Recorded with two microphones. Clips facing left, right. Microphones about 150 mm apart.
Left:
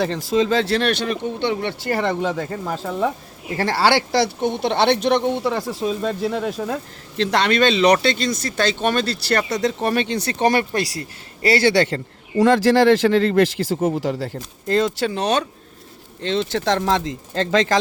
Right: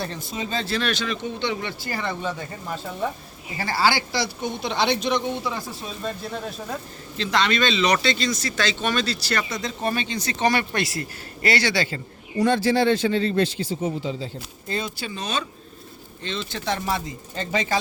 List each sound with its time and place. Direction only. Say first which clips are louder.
0.0 s speech: left 11 dB; 90° left
3.6 s speech: left 5 dB; 75° left (ahead or behind)
7.2 s speech: left 5 dB; 65° left (ahead or behind); by 11.7 s 40° left (ahead or behind)
11.7 s a man's voice: left 7 dB; 65° left (ahead or behind); by 13.7 s 90° left
13.7 s speech: left 7 dB; 50° left (ahead or behind)
14.0 s a man's voice: left 6 dB; 80° left